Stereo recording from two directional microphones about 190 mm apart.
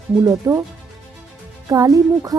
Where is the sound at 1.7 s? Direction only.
15° right (ahead or behind).